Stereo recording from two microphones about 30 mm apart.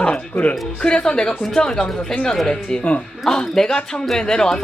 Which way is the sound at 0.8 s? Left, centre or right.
Left.